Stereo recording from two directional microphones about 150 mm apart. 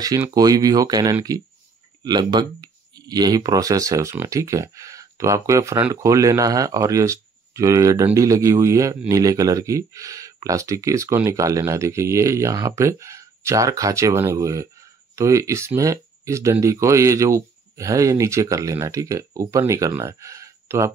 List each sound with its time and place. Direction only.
0.0 s speech: 25° right (ahead or behind)